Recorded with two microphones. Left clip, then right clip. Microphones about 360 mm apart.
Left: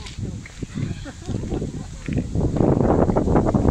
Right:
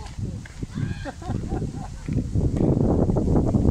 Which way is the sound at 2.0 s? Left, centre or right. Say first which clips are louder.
Left 4 dB; left.